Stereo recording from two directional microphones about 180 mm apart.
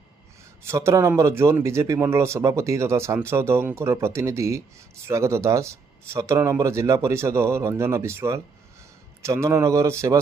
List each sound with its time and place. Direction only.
0.6 s speech: 15° right (ahead or behind)